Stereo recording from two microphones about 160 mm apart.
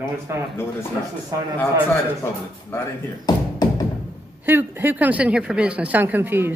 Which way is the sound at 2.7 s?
15° left (ahead or behind).